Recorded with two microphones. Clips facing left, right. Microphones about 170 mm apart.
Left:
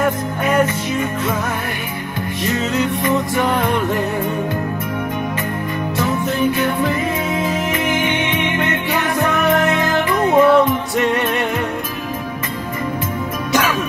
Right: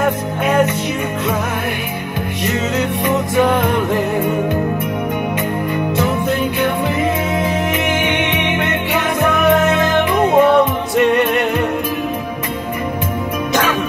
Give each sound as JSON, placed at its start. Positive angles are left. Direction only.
{"t": 8.0, "sound": "music", "side_deg": -65}
{"t": 10.1, "sound": "music", "side_deg": -20}